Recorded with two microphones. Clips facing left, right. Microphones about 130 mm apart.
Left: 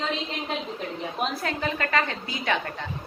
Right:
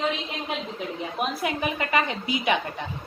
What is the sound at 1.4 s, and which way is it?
A woman's voice, 15° right (ahead or behind).